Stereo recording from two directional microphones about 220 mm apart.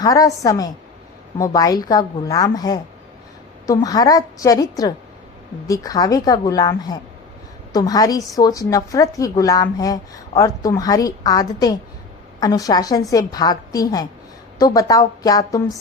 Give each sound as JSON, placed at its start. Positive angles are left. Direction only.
{"t": 0.0, "sound": "a woman's voice", "side_deg": 15}